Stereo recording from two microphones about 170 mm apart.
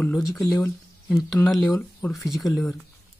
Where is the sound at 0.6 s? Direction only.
15° left (ahead or behind).